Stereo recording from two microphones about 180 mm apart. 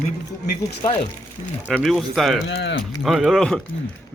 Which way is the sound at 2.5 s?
80° left.